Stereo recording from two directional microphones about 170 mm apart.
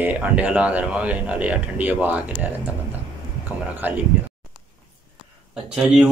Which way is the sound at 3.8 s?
10° right (ahead or behind).